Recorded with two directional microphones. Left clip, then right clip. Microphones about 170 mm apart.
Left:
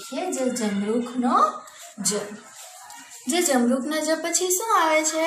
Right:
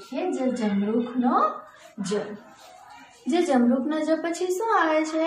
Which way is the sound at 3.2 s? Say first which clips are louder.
Even; 15° left (ahead or behind).